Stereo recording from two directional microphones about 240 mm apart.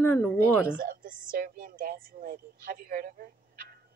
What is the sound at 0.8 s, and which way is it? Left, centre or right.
Music, right.